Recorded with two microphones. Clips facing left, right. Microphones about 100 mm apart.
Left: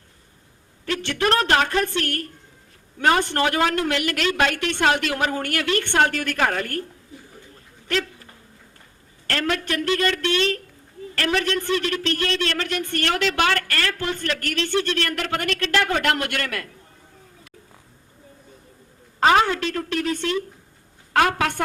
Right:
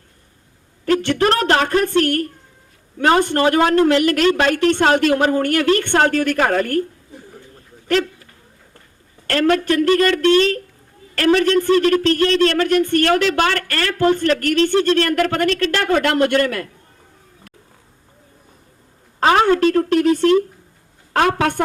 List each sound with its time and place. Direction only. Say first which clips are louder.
0.9 s speech: right 6 dB; 45° right (ahead or behind)
9.3 s speech: right 8 dB; 40° right (ahead or behind)
19.2 s a woman's voice: right 4 dB; 35° right (ahead or behind)